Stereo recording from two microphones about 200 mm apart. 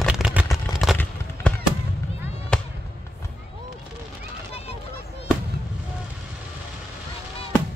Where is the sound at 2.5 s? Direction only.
5° left (ahead or behind).